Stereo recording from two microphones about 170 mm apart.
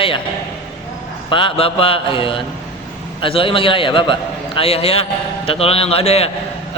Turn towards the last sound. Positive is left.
turn(degrees=35)  # may be behind; listen again after turning